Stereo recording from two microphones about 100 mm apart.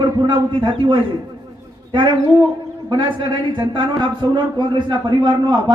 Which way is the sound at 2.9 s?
50° right (ahead or behind).